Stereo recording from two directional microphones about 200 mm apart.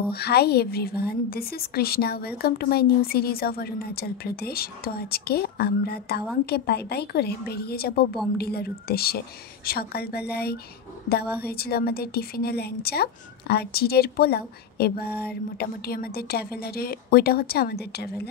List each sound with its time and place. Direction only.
0.1 s a woman's voice: 55° left (ahead or behind)